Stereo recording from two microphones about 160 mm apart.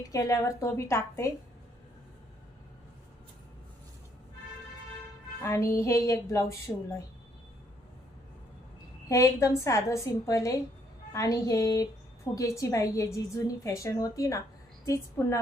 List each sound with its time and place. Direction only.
0.1 s a woman's voice: 20° left (ahead or behind)
5.4 s a woman's voice: 20° left (ahead or behind)
9.0 s a woman's voice: 20° left (ahead or behind)